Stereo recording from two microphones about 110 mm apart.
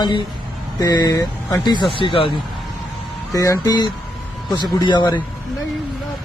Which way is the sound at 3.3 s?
30° left (ahead or behind).